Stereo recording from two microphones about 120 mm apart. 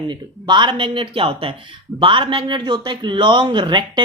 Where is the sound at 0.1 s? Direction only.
40° right (ahead or behind).